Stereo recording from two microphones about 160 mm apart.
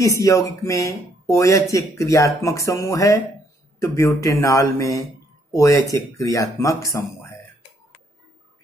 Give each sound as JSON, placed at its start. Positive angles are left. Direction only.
{"t": 0.0, "sound": "speech", "side_deg": 20}